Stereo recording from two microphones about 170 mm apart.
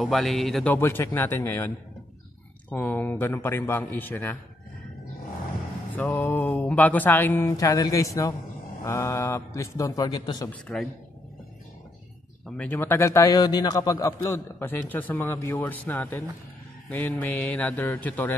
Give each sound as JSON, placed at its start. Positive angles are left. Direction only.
{"t": 0.0, "sound": "speech", "side_deg": 0}
{"t": 0.7, "sound": "a man's voice", "side_deg": 15}
{"t": 2.7, "sound": "a man's voice", "side_deg": 10}
{"t": 5.9, "sound": "a man's voice", "side_deg": 10}
{"t": 10.5, "sound": "a man's voice", "side_deg": 5}
{"t": 12.4, "sound": "a man's voice", "side_deg": 10}